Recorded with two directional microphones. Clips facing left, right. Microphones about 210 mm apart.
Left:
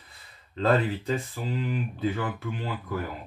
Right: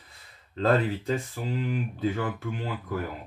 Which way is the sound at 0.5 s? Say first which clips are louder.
Even; 45° right (ahead or behind).